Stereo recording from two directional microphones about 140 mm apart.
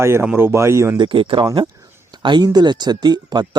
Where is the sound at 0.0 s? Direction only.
20° right (ahead or behind).